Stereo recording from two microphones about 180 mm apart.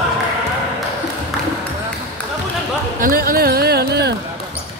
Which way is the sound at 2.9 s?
50° right (ahead or behind).